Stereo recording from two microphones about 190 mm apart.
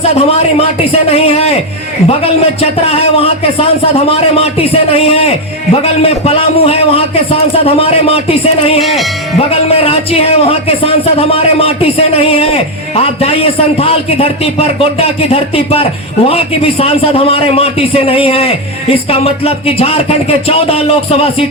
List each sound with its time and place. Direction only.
0.0 s a man's voice: 35° left (ahead or behind)
8.8 s speech: centre (ahead or behind)
9.4 s a man's voice: 30° left (ahead or behind)